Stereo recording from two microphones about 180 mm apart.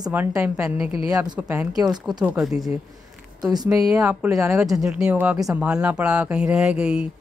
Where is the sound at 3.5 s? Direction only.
20° right (ahead or behind).